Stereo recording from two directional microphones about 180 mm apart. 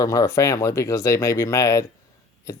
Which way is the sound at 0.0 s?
20° left (ahead or behind).